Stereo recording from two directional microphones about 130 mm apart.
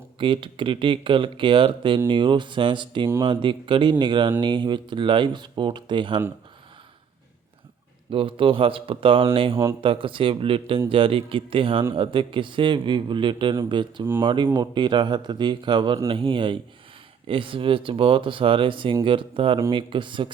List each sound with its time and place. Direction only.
0.2 s a man's voice: 40° right (ahead or behind)
8.1 s a man's voice: 45° right (ahead or behind)